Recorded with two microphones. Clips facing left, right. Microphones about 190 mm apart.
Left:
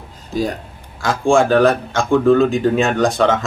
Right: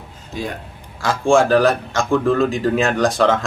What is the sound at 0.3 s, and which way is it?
Speech, 40° left (ahead or behind).